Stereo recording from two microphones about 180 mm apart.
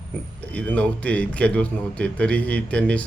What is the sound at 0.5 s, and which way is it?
A man's voice, 10° left (ahead or behind).